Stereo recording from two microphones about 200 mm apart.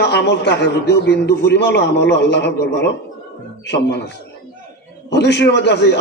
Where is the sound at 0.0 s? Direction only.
60° left (ahead or behind).